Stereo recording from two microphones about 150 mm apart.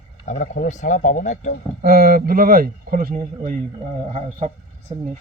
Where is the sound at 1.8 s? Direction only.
80° right.